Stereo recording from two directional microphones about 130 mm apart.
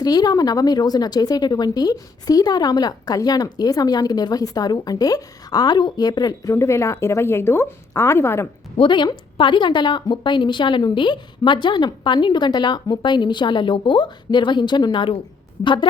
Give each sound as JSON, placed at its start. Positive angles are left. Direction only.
{"t": 0.0, "sound": "speech", "side_deg": 30}
{"t": 8.8, "sound": "speech", "side_deg": 35}